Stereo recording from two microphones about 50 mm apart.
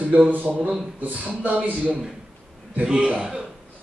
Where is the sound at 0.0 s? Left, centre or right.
Right.